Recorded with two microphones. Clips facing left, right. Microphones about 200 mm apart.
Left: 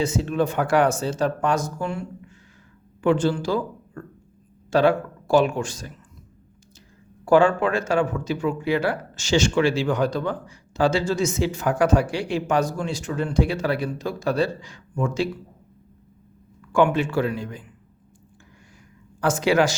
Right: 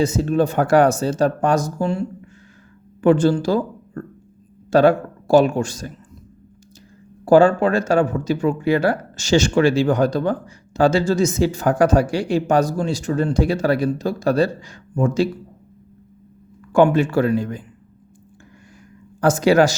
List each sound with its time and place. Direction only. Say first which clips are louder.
0.0 s speech: right 5 dB; 40° right (ahead or behind)
3.0 s speech: right 5 dB; 45° right (ahead or behind)
7.3 s speech: right 4 dB; 35° right (ahead or behind)
16.7 s speech: right 5 dB; 40° right (ahead or behind)
19.2 s speech: right 5 dB; 40° right (ahead or behind)